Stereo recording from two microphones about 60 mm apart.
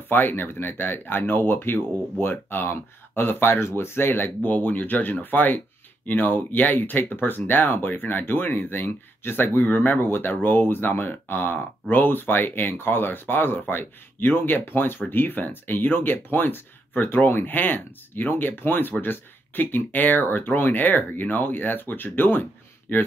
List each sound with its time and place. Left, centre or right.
0.1 s speech: left